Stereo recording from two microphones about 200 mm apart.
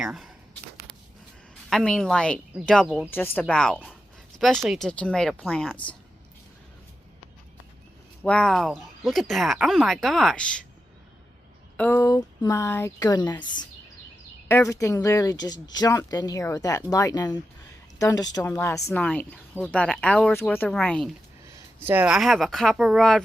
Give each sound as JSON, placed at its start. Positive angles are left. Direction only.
{"t": 0.0, "sound": "speech", "side_deg": 0}
{"t": 1.7, "sound": "speech", "side_deg": 5}
{"t": 8.2, "sound": "speech", "side_deg": 5}
{"t": 11.8, "sound": "speech", "side_deg": 10}
{"t": 14.4, "sound": "speech", "side_deg": 15}
{"t": 21.5, "sound": "speech", "side_deg": -10}